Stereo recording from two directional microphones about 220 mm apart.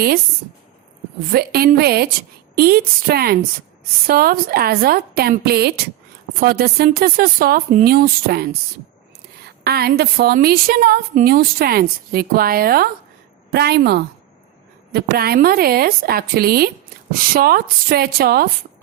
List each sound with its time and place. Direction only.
1.3 s a woman's voice: 45° right (ahead or behind)